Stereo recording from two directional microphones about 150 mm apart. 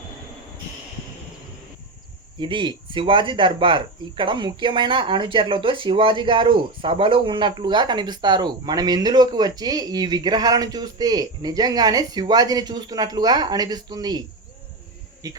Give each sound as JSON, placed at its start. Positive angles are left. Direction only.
{"t": 2.4, "sound": "speech", "side_deg": -35}
{"t": 15.2, "sound": "speech", "side_deg": -25}